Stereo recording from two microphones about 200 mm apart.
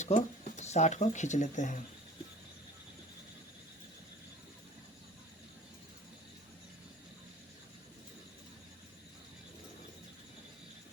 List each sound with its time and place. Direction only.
0.0 s speech: 35° left (ahead or behind)